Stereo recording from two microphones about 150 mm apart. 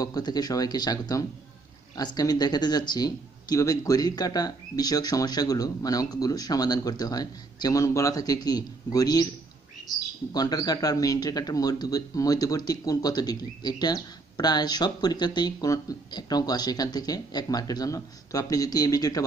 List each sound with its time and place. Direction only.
0.0 s speech: 25° left (ahead or behind)
10.3 s speech: 25° left (ahead or behind)